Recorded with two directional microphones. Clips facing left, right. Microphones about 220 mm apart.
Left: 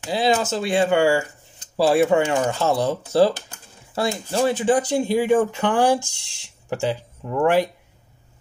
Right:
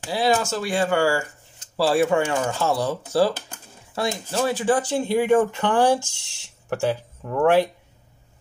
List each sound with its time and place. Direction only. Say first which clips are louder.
0.1 s speech: left 1 dB; 20° left (ahead or behind)